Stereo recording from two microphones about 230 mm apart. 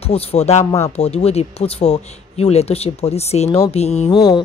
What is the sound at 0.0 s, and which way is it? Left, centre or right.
A woman's voice, left.